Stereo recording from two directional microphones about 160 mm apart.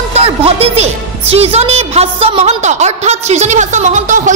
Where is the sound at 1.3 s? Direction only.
40° right (ahead or behind).